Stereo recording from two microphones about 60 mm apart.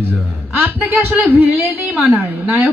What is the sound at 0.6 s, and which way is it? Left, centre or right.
A woman's voice, right.